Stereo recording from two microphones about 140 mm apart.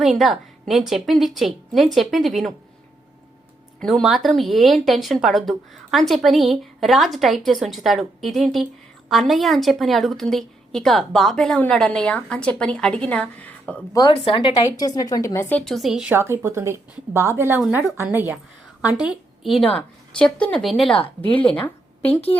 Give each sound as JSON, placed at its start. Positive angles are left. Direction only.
{"t": 0.0, "sound": "speech", "side_deg": 0}
{"t": 3.8, "sound": "speech", "side_deg": 5}
{"t": 14.6, "sound": "speech", "side_deg": 25}
{"t": 15.6, "sound": "speech", "side_deg": 0}
{"t": 16.1, "sound": "a woman's voice", "side_deg": -20}